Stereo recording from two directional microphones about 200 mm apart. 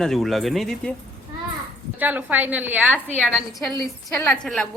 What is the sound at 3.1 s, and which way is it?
Speech, centre (ahead or behind).